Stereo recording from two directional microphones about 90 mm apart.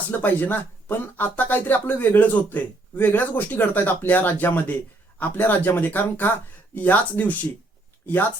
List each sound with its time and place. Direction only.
0.1 s speech: 20° left (ahead or behind)